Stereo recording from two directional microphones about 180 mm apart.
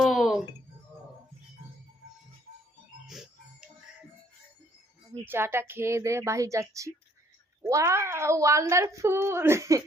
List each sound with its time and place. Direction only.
0.0 s music: centre (ahead or behind)
5.1 s speech: 15° right (ahead or behind)